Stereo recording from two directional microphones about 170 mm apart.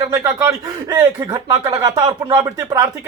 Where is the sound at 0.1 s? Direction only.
20° right (ahead or behind).